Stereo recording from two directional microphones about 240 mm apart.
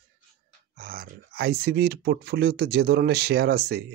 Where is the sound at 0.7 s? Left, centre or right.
Right.